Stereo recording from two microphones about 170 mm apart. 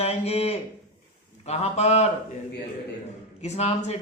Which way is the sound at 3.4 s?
40° left (ahead or behind).